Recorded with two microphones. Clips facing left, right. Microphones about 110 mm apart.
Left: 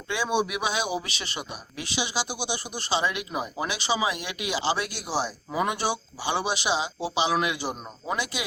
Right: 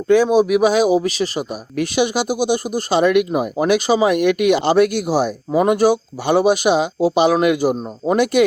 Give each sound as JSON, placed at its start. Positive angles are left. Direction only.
{"t": 0.1, "sound": "speech", "side_deg": -40}
{"t": 1.7, "sound": "speech", "side_deg": -50}